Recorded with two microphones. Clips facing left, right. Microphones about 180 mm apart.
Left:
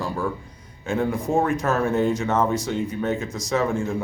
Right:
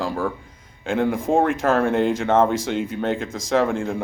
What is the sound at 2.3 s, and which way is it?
Speech, 75° right (ahead or behind).